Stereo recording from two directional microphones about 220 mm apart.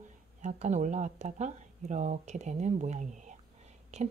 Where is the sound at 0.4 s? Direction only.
30° right (ahead or behind).